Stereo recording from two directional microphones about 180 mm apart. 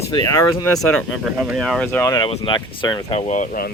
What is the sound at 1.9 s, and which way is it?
Speech, 10° left (ahead or behind).